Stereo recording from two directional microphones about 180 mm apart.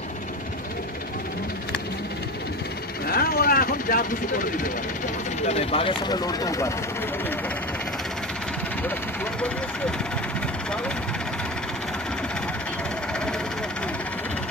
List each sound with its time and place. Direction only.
3.1 s speech: 55° left (ahead or behind)
5.5 s speech: 35° left (ahead or behind); by 6.7 s 20° left (ahead or behind)
8.8 s speech: 10° left (ahead or behind)